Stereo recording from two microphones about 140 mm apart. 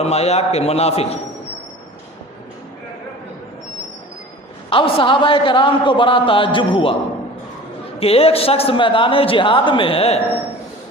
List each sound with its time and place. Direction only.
0.0 s a man's voice: 50° left (ahead or behind)
4.7 s a man's voice: 35° left (ahead or behind)
7.9 s a man's voice: 45° left (ahead or behind)